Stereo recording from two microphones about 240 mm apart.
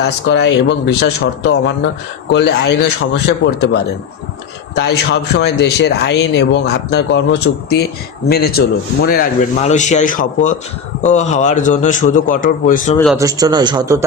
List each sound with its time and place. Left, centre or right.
0.0 s a man's voice: left
4.8 s a man's voice: left
9.0 s a man's voice: left
13.1 s a man's voice: centre